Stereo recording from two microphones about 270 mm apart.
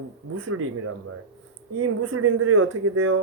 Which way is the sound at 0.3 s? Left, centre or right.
Right.